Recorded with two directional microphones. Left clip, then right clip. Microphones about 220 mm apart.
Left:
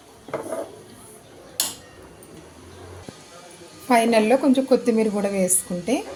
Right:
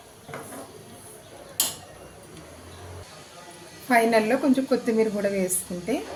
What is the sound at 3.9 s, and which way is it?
A woman's voice, 20° left (ahead or behind).